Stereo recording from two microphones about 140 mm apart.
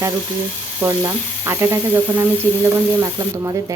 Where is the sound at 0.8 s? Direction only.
15° right (ahead or behind).